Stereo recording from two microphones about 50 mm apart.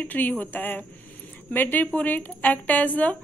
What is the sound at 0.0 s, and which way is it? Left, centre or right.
Speech, left.